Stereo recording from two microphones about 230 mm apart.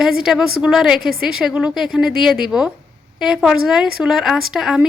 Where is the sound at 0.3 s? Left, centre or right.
Centre.